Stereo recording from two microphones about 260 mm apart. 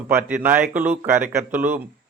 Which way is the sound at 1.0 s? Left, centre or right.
Right.